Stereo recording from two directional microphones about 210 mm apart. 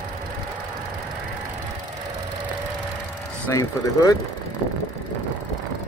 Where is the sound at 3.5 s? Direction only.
15° left (ahead or behind).